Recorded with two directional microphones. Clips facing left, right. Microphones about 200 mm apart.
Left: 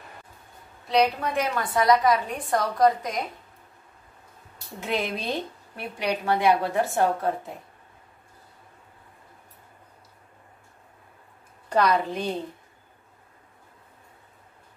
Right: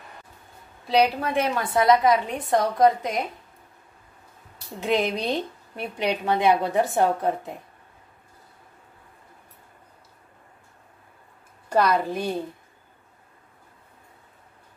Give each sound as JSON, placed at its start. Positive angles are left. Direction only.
{"t": 0.8, "sound": "a woman's voice", "side_deg": -30}
{"t": 4.7, "sound": "a woman's voice", "side_deg": -15}
{"t": 11.7, "sound": "a woman's voice", "side_deg": -10}